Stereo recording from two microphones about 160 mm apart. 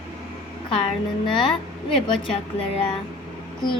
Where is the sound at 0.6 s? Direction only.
35° left (ahead or behind).